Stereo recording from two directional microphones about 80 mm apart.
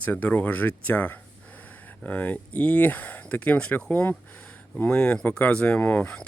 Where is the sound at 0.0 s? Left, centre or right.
Left.